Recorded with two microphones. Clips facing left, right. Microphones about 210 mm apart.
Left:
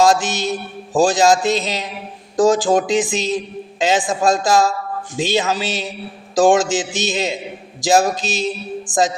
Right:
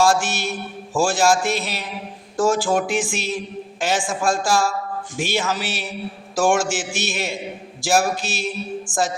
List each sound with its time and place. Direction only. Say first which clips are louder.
0.0 s a man's voice: left 3 dB; 20° left (ahead or behind)